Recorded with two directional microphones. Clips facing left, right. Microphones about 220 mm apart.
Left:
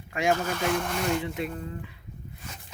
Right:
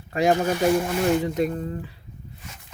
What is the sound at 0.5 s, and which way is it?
Speech, 10° right (ahead or behind).